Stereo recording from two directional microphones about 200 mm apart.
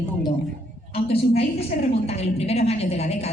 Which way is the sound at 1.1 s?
30° left (ahead or behind).